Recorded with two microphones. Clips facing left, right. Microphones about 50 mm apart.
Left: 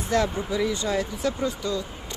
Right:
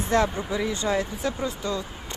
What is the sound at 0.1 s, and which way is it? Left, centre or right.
Speech, right.